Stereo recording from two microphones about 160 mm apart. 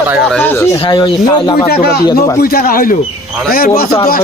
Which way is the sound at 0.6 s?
25° left (ahead or behind).